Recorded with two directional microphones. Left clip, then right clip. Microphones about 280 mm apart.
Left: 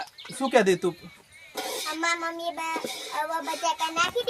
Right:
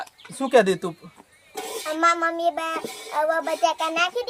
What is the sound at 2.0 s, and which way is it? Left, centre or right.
Speech, centre.